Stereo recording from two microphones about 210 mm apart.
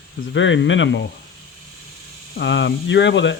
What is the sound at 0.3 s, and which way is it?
Speech, 60° left (ahead or behind).